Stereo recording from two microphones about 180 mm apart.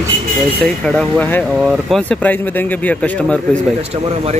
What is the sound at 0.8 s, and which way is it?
Speech, 5° left (ahead or behind).